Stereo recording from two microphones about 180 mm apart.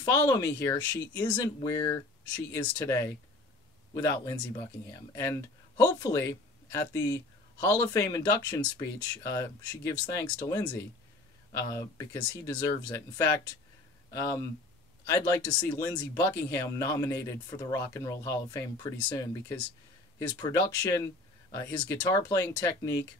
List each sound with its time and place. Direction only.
0.1 s speech: 20° left (ahead or behind)
15.0 s speech: 15° left (ahead or behind)